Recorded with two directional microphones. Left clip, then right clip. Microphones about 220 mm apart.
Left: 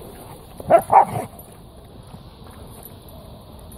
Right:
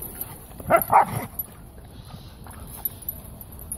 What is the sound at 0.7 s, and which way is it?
Dog, 20° right (ahead or behind).